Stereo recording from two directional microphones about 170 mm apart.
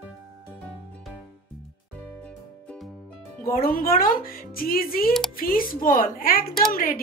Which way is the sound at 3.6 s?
55° left (ahead or behind).